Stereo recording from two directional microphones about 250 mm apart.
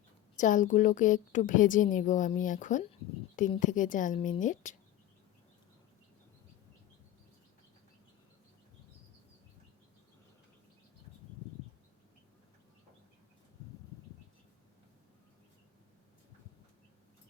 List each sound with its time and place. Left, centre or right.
0.3 s a woman's voice: left